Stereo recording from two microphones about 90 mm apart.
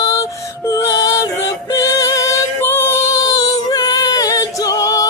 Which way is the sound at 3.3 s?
45° left (ahead or behind).